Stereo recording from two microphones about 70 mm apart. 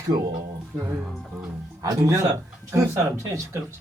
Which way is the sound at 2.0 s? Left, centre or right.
Right.